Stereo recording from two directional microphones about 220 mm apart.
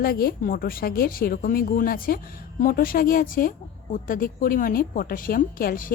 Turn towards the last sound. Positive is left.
turn(degrees=40)  # may be behind; listen again after turning